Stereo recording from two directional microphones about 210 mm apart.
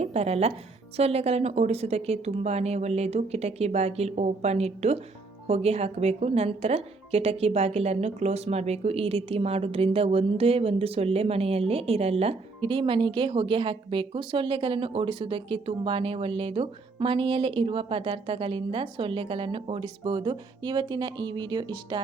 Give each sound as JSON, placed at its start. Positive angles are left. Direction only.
{"t": 0.0, "sound": "a woman's voice", "side_deg": -30}